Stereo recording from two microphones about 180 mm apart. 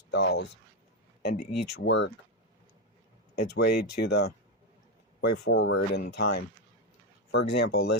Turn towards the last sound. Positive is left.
turn(degrees=65)  # may be behind; listen again after turning